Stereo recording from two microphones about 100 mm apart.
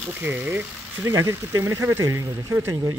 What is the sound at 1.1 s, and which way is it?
Speech, 35° right (ahead or behind).